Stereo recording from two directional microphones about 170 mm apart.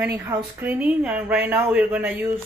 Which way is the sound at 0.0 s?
10° right (ahead or behind).